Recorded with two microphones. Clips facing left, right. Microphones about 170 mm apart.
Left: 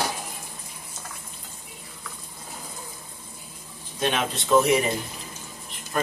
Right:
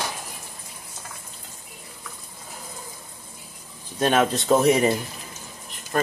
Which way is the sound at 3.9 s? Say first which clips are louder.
Right 6 dB; 45° right (ahead or behind).